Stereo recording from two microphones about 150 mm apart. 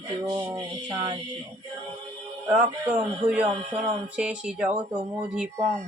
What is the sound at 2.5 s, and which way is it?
Speech, 10° right (ahead or behind).